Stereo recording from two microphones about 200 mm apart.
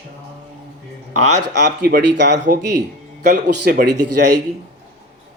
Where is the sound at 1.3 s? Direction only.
60° right (ahead or behind).